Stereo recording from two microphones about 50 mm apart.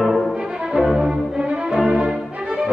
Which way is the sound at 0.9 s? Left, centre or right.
Centre.